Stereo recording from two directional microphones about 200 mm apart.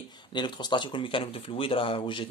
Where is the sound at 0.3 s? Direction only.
20° left (ahead or behind).